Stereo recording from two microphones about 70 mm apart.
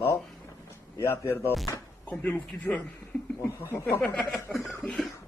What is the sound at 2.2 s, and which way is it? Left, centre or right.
Speech, centre.